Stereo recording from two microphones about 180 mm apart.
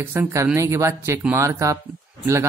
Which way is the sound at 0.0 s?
15° right (ahead or behind).